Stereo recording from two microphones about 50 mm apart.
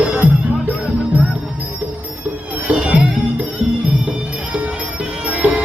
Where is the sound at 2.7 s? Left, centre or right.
Right.